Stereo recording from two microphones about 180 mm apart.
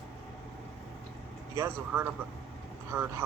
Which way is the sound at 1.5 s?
15° right (ahead or behind).